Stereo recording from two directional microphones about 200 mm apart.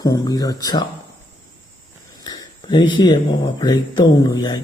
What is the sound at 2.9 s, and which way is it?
Speech, 20° left (ahead or behind).